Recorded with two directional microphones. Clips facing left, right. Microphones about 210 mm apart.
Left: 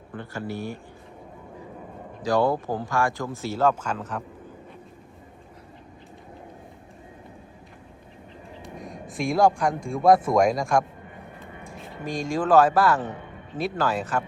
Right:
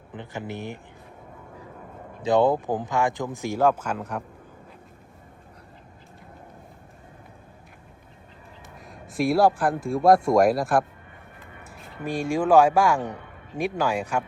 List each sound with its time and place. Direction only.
0.1 s speech: 20° right (ahead or behind)
2.2 s speech: 20° right (ahead or behind)
8.8 s speech: centre (ahead or behind)
12.0 s speech: 10° right (ahead or behind)